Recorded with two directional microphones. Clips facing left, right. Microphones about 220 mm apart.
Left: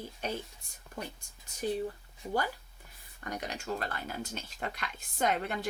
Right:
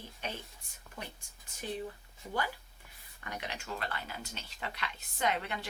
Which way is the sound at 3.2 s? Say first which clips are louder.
Left 5 dB; 40° left (ahead or behind).